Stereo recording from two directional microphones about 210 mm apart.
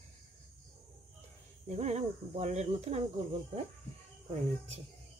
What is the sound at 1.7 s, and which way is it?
Speech, 30° right (ahead or behind).